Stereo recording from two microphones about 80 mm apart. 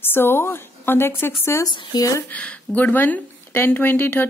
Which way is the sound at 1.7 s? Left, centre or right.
Left.